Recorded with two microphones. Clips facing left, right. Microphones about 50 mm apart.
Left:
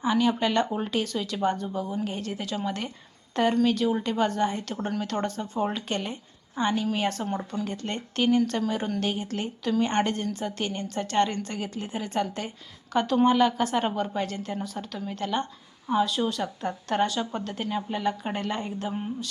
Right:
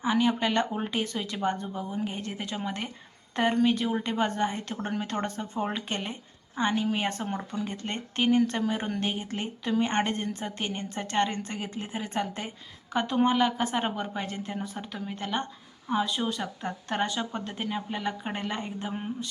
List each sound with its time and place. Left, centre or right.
0.0 s a woman's voice: right
16.4 s a woman's voice: centre